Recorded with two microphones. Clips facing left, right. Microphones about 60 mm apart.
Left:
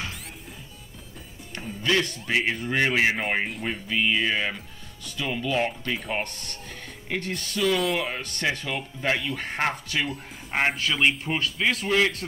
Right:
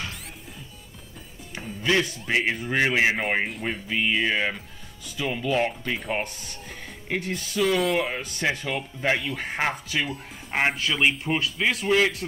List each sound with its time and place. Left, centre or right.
1.5 s speech: centre